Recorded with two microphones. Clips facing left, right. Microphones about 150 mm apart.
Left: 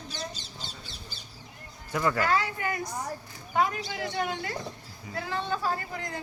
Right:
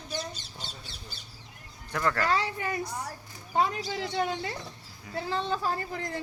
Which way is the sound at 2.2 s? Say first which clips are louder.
Left 1 dB; 30° right (ahead or behind).